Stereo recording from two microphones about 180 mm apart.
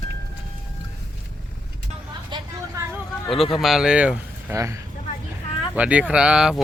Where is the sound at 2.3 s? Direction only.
15° right (ahead or behind).